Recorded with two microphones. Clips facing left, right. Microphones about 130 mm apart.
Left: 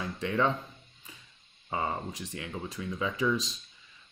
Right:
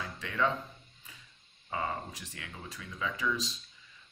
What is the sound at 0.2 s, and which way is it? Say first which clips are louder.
Speech: left 7 dB; 25° left (ahead or behind).